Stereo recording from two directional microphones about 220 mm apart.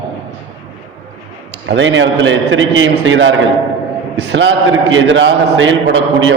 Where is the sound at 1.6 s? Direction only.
55° right (ahead or behind).